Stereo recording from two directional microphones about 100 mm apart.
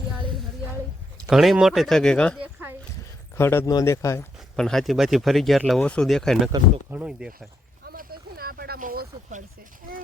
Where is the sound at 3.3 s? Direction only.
25° left (ahead or behind).